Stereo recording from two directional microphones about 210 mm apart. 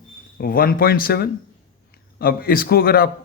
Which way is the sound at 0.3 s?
45° left (ahead or behind).